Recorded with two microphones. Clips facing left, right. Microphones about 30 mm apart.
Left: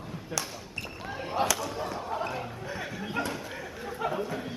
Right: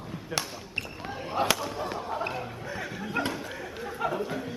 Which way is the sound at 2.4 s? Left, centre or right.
Centre.